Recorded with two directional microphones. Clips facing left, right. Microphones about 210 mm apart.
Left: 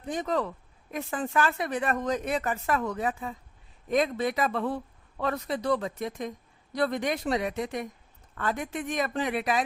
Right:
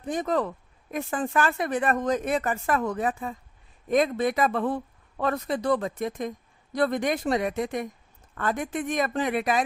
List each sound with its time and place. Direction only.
0.1 s speech: 50° right (ahead or behind)